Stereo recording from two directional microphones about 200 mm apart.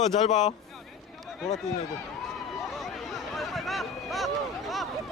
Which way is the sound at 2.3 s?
Centre (ahead or behind).